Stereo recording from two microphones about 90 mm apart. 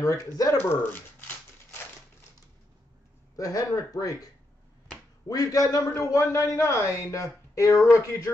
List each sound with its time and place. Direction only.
0.0 s a man's voice: 40° left (ahead or behind)
0.6 s speech: 25° left (ahead or behind)
3.3 s a man's voice: 40° left (ahead or behind)
5.3 s a man's voice: 40° left (ahead or behind)